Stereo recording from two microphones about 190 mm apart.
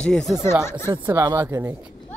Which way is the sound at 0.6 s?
15° left (ahead or behind).